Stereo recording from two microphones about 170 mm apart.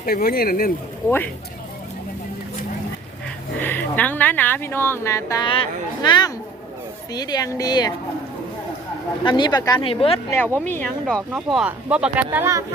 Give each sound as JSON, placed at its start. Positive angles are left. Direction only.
{"t": 0.0, "sound": "speech", "side_deg": 60}
{"t": 3.6, "sound": "speech", "side_deg": 10}
{"t": 5.5, "sound": "a woman's voice", "side_deg": 30}
{"t": 9.2, "sound": "a woman's voice", "side_deg": 25}
{"t": 10.8, "sound": "speech", "side_deg": 5}